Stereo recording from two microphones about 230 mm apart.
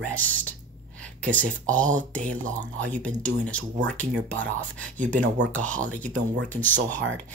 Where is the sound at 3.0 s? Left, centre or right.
Centre.